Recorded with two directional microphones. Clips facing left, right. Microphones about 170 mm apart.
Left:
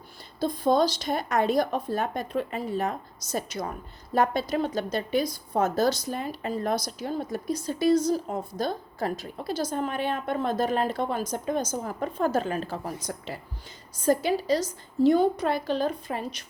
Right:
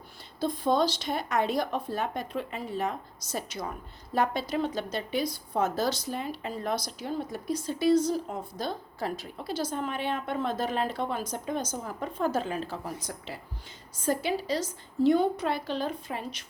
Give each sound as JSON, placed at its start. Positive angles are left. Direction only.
{"t": 0.3, "sound": "a woman's voice", "side_deg": 40}